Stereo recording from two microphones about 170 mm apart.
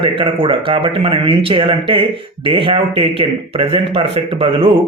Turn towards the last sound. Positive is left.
turn(degrees=-30)  # may be behind; listen again after turning